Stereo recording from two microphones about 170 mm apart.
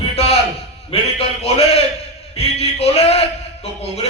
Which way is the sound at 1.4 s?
35° left (ahead or behind).